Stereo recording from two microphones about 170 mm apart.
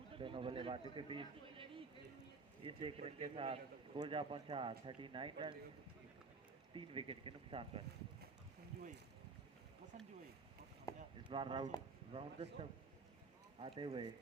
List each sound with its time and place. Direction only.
0.1 s a man's voice: 30° right (ahead or behind)
6.7 s a man's voice: 30° right (ahead or behind)
10.9 s chop: 20° left (ahead or behind)
11.2 s a man's voice: 30° right (ahead or behind)